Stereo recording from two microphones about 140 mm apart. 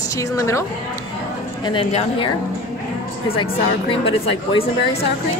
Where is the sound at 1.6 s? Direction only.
35° left (ahead or behind).